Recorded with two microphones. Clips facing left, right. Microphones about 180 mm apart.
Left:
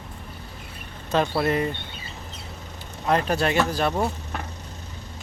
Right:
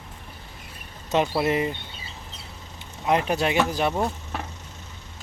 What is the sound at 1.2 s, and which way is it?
Speech, 10° right (ahead or behind).